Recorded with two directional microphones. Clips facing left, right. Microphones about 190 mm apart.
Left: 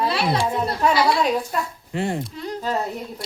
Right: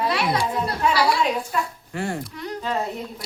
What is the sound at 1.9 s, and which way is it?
Speech, 20° left (ahead or behind).